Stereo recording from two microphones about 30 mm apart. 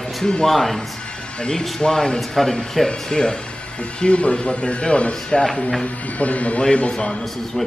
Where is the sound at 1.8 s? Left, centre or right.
Left.